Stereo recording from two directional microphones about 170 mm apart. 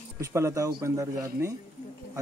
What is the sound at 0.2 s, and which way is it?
A man's voice, 20° right (ahead or behind).